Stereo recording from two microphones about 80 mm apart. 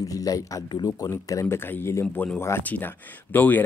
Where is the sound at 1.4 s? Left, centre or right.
Left.